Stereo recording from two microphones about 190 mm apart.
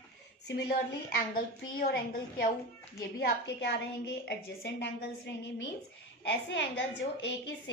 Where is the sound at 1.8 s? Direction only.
50° left (ahead or behind); by 6.8 s 70° left (ahead or behind).